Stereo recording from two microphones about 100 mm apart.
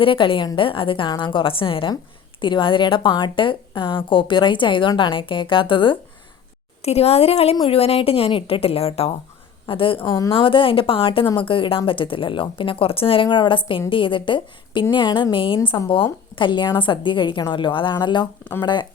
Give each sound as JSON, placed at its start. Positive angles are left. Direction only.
{"t": 0.0, "sound": "a woman's voice", "side_deg": 60}
{"t": 6.8, "sound": "speech", "side_deg": 90}
{"t": 7.7, "sound": "a woman's voice", "side_deg": 75}
{"t": 9.6, "sound": "a woman's voice", "side_deg": 60}
{"t": 13.3, "sound": "a woman's voice", "side_deg": 55}